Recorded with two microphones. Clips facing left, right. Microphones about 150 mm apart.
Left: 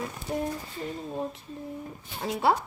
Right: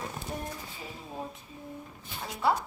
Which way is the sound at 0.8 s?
5° right (ahead or behind).